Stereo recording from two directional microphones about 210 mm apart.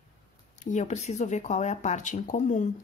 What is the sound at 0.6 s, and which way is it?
A woman's voice, 35° left (ahead or behind).